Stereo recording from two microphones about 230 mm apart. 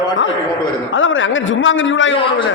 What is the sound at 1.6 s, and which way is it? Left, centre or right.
Speech, left.